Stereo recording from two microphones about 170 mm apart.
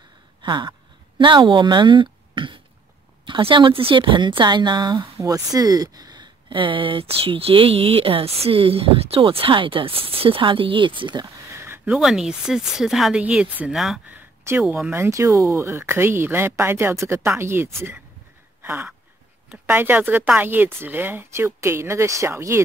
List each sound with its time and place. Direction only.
0.4 s a woman's voice: 25° right (ahead or behind); by 14.2 s centre (ahead or behind)
14.4 s speech: 15° right (ahead or behind)
18.6 s a sound: 15° right (ahead or behind)
19.5 s speech: 10° right (ahead or behind)